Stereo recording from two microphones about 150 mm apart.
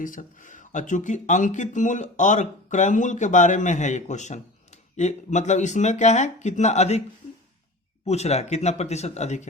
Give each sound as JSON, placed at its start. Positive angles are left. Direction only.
{"t": 0.0, "sound": "speech", "side_deg": 60}
{"t": 8.0, "sound": "speech", "side_deg": 45}